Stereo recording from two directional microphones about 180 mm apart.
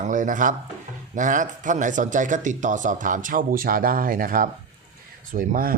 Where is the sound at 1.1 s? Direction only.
45° right (ahead or behind).